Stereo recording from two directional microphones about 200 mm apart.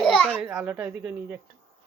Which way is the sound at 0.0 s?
Centre (ahead or behind).